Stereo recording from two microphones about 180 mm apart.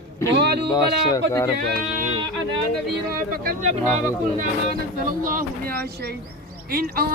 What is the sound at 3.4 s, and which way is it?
Speech, 40° right (ahead or behind).